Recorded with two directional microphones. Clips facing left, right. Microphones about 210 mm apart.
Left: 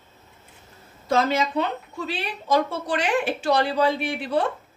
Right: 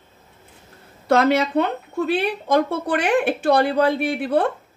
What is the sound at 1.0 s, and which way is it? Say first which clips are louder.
Speech: right 5 dB; 65° right (ahead or behind).